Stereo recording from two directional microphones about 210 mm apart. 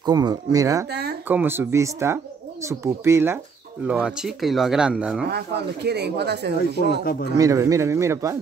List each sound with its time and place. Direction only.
0.0 s speech: 20° right (ahead or behind)
5.9 s speech: 50° right (ahead or behind)
7.3 s speech: 15° right (ahead or behind)